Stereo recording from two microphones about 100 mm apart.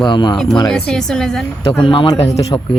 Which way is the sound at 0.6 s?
5° left (ahead or behind).